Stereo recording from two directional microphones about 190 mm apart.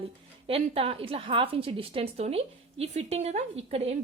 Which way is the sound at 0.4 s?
30° right (ahead or behind).